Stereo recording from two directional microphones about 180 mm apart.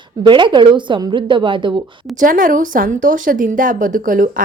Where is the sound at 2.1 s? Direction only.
50° right (ahead or behind).